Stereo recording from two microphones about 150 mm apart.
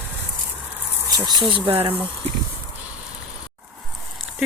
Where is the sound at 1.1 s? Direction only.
25° right (ahead or behind).